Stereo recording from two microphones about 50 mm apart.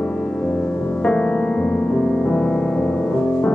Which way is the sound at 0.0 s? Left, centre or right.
Centre.